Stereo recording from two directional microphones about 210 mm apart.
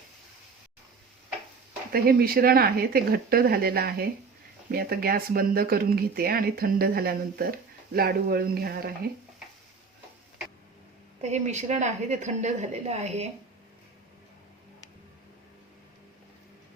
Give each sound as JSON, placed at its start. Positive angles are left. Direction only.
{"t": 1.9, "sound": "speech", "side_deg": -45}
{"t": 11.2, "sound": "speech", "side_deg": -35}